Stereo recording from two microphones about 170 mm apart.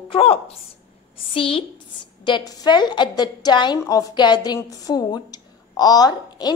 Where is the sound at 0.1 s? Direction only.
35° left (ahead or behind).